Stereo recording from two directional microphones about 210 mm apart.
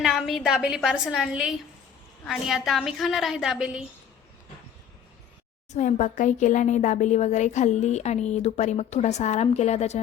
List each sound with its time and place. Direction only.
0.0 s a woman's voice: centre (ahead or behind)
5.7 s speech: 35° left (ahead or behind)